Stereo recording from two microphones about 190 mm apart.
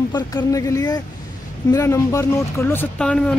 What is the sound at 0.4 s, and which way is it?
Speech, 15° left (ahead or behind).